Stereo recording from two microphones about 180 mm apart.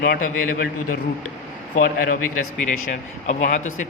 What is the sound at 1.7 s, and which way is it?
Speech, 50° left (ahead or behind).